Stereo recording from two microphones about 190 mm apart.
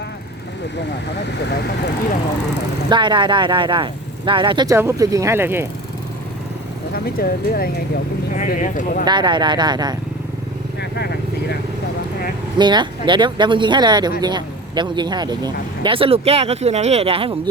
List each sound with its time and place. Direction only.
1.5 s speech: 60° left (ahead or behind)
2.9 s speech: 25° right (ahead or behind)
6.9 s speech: 50° left (ahead or behind)
8.3 s speech: 40° left (ahead or behind)
9.0 s speech: 25° right (ahead or behind)
10.8 s vehicle: 60° left (ahead or behind)
12.5 s speech: 25° right (ahead or behind)